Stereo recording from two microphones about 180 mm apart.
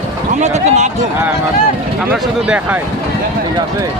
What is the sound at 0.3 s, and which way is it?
Speech, 40° right (ahead or behind).